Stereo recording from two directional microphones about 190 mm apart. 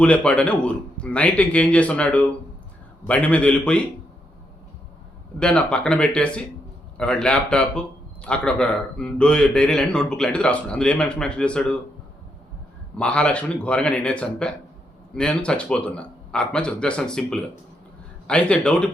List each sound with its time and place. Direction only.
0.0 s speech: 5° left (ahead or behind)
5.4 s a man's voice: 5° left (ahead or behind)
13.0 s a man's voice: 5° left (ahead or behind)